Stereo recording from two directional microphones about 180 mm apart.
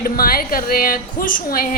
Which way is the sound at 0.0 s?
55° left (ahead or behind).